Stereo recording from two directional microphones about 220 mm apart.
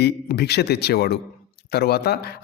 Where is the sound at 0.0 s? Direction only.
45° left (ahead or behind).